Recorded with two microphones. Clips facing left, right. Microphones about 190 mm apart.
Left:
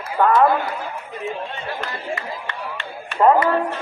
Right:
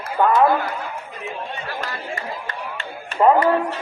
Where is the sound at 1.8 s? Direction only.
40° right (ahead or behind).